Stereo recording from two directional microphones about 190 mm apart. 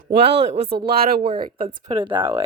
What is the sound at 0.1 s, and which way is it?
Speech, 60° right (ahead or behind).